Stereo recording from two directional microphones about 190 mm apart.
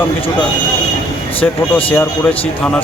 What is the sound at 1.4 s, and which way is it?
Speech, 10° left (ahead or behind).